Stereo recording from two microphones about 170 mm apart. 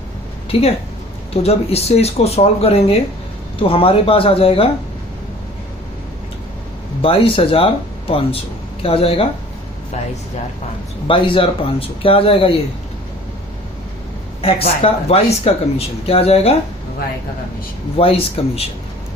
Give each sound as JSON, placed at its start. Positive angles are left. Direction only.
{"t": 0.5, "sound": "speech", "side_deg": 35}
{"t": 7.0, "sound": "speech", "side_deg": 35}
{"t": 11.1, "sound": "speech", "side_deg": 30}
{"t": 14.4, "sound": "speech", "side_deg": 35}
{"t": 17.9, "sound": "speech", "side_deg": 35}